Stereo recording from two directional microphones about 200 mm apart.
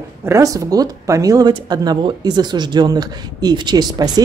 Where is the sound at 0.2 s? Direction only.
15° right (ahead or behind).